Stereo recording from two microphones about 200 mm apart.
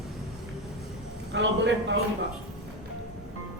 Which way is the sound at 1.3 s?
65° right (ahead or behind).